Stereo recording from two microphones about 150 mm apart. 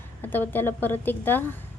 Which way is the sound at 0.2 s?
15° left (ahead or behind).